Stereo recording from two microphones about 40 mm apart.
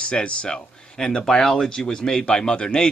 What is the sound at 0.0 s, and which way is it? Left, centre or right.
Speech, left.